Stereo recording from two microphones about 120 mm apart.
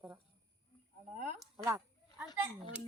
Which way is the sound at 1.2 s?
80° right.